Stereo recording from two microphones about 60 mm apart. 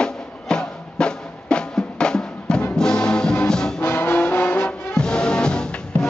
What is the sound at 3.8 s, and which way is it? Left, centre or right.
Music, left.